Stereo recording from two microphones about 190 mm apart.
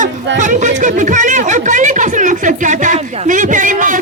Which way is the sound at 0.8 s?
40° right (ahead or behind).